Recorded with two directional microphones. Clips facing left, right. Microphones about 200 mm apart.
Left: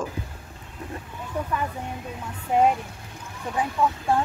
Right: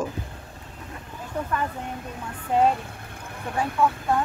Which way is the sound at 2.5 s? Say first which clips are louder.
Left 1 dB; 15° left (ahead or behind).